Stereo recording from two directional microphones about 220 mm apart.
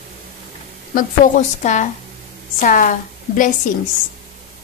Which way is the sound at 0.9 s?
35° left (ahead or behind).